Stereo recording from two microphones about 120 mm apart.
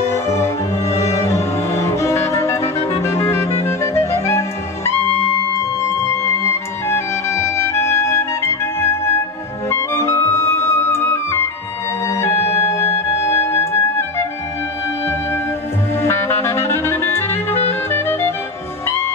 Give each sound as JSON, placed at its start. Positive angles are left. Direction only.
{"t": 0.1, "sound": "music", "side_deg": 25}
{"t": 2.6, "sound": "music", "side_deg": 60}
{"t": 3.0, "sound": "music", "side_deg": 20}
{"t": 9.7, "sound": "clarinet", "side_deg": 20}
{"t": 12.1, "sound": "music", "side_deg": 20}
{"t": 16.0, "sound": "clarinet", "side_deg": 20}